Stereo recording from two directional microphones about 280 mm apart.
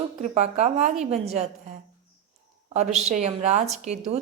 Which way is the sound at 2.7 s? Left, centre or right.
Right.